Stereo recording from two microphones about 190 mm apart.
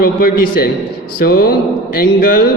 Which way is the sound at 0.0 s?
50° left (ahead or behind).